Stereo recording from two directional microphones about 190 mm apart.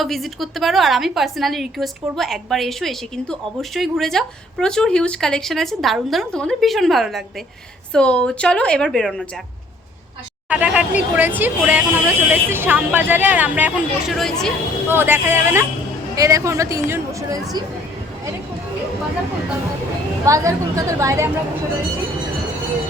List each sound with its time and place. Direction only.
0.0 s a woman's voice: centre (ahead or behind)
10.5 s speech: 5° right (ahead or behind)
14.8 s speech: 10° right (ahead or behind)
20.2 s speech: 15° right (ahead or behind)